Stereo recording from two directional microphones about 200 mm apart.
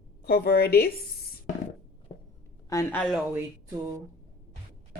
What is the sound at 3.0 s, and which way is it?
Speech, centre (ahead or behind).